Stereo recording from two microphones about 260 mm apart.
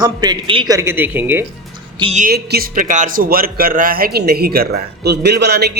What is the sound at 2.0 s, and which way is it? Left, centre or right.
Speech, right.